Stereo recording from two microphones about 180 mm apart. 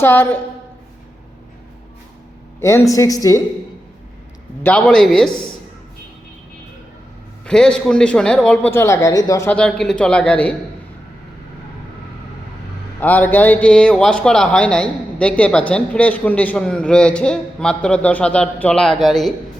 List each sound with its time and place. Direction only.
0.0 s speech: 10° left (ahead or behind)
2.6 s speech: 15° left (ahead or behind)
4.6 s a man's voice: 5° left (ahead or behind)
7.4 s a man's voice: 5° left (ahead or behind)
13.0 s a man's voice: 10° left (ahead or behind)